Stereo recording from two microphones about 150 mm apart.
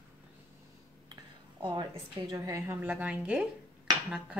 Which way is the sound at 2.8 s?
10° right (ahead or behind).